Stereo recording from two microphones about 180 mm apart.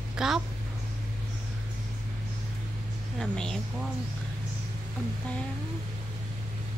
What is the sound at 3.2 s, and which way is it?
Speech, 5° left (ahead or behind).